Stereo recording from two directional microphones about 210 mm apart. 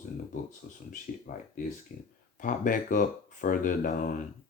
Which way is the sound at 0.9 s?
40° left (ahead or behind).